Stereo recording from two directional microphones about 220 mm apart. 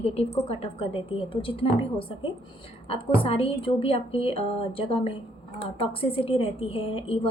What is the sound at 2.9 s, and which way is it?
A woman's voice, 25° left (ahead or behind).